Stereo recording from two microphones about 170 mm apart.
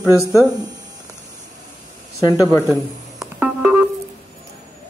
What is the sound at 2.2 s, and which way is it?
Speech, 20° left (ahead or behind).